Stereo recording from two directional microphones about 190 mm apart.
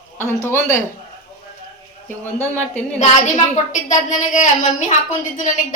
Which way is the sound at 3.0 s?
35° left (ahead or behind).